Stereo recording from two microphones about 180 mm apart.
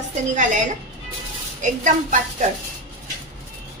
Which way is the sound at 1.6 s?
45° right (ahead or behind).